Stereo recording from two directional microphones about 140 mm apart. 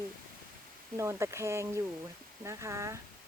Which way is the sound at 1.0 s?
20° right (ahead or behind).